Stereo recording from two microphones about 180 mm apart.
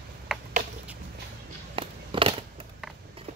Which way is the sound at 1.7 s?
30° right (ahead or behind).